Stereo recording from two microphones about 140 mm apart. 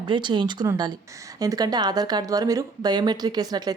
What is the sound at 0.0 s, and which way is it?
Speech, 35° right (ahead or behind).